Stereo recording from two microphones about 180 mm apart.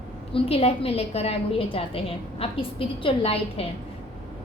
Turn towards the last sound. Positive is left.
turn(degrees=35)  # may be behind; listen again after turning